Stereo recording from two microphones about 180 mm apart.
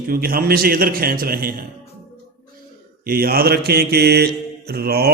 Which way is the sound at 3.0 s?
55° right (ahead or behind).